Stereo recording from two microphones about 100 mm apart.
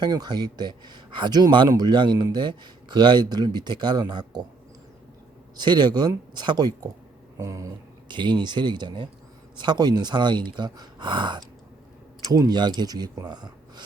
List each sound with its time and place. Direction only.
0.0 s speech: 45° right (ahead or behind)
5.5 s speech: 45° right (ahead or behind)
7.3 s a sound: 30° right (ahead or behind)
8.0 s speech: 50° right (ahead or behind)